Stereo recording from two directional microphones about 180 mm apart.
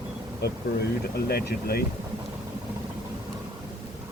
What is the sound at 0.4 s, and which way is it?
Speech, 65° left (ahead or behind).